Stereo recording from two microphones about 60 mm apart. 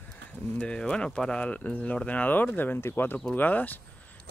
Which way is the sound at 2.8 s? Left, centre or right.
Left.